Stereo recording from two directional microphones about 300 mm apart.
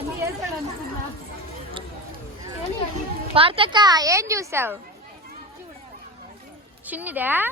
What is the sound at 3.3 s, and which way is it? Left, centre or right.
A child's voice, centre.